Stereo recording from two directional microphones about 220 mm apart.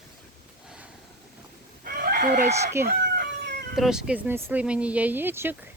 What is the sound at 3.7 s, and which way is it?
Speech, centre (ahead or behind).